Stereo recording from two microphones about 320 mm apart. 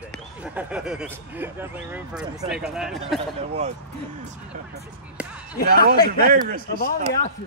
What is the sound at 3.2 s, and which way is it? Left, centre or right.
Speech, right.